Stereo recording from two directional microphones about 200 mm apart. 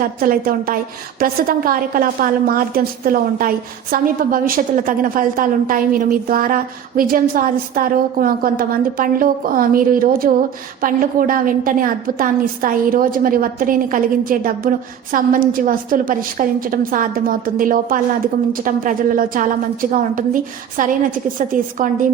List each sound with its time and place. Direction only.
0.0 s a woman's voice: 45° right (ahead or behind)